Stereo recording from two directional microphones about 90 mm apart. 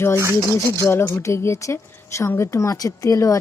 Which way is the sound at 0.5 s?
30° left (ahead or behind).